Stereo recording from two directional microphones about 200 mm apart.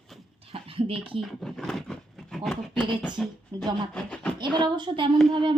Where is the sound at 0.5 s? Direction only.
30° right (ahead or behind).